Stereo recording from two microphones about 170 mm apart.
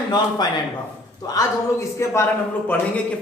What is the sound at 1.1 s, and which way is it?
A man's voice, 20° left (ahead or behind).